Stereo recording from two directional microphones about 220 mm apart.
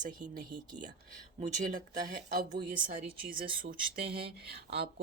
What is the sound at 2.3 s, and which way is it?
Speech, 35° right (ahead or behind).